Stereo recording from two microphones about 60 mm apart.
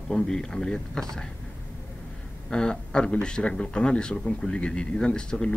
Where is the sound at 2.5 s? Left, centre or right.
Centre.